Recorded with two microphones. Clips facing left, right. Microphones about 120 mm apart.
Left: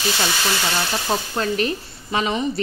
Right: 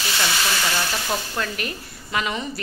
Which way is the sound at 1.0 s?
25° left (ahead or behind).